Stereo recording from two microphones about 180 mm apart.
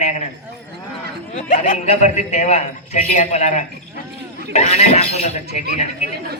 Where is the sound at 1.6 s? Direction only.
35° left (ahead or behind).